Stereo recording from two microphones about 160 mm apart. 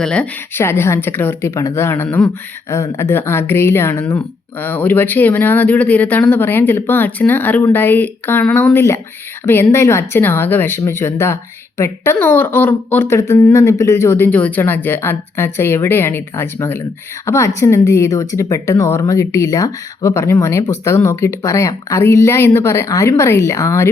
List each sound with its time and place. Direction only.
0.0 s speech: 5° left (ahead or behind)